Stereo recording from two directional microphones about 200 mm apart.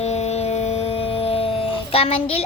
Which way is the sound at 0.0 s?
35° left (ahead or behind).